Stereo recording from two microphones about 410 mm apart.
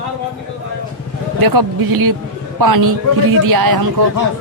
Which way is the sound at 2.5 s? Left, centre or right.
Right.